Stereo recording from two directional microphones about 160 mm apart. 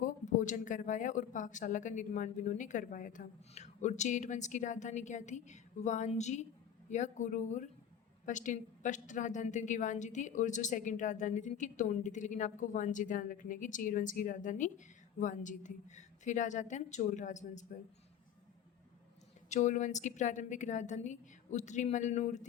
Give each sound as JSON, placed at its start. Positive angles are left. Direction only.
{"t": 0.0, "sound": "a woman's voice", "side_deg": 50}
{"t": 19.5, "sound": "a woman's voice", "side_deg": 50}